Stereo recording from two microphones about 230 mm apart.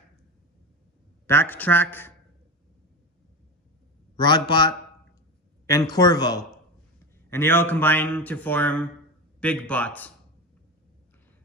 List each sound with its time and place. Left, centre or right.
1.2 s a man's voice: centre
4.2 s a man's voice: centre